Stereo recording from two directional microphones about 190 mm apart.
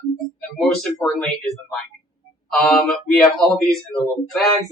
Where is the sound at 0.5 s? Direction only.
Centre (ahead or behind).